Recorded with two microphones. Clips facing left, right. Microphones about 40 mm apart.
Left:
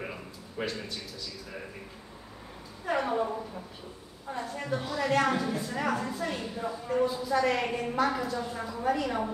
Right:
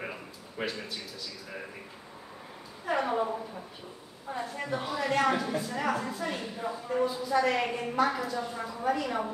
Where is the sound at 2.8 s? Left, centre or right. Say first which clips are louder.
Even; centre.